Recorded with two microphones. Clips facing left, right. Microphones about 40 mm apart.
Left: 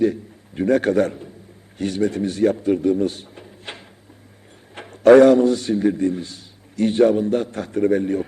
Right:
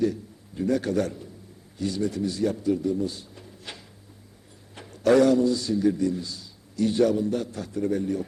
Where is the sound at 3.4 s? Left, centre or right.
Left.